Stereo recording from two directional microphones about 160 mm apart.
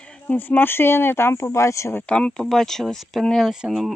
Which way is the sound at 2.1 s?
5° left (ahead or behind).